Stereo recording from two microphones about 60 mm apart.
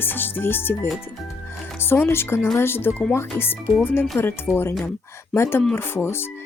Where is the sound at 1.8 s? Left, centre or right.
Left.